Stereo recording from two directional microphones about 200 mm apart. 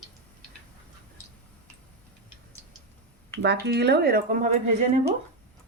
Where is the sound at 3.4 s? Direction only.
55° right (ahead or behind).